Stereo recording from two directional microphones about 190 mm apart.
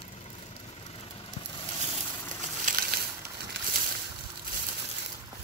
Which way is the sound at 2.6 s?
45° right (ahead or behind).